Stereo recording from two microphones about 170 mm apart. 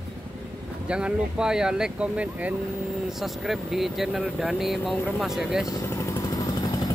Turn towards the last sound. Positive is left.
turn(degrees=20)  # may be behind; listen again after turning